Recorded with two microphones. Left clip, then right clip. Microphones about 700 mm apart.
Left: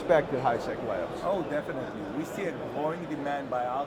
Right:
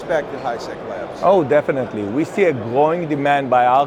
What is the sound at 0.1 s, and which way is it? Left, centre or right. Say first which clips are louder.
Speech: right 3 dB; left.